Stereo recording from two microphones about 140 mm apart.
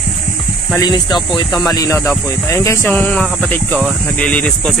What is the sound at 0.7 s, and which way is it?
Speech, 30° left (ahead or behind).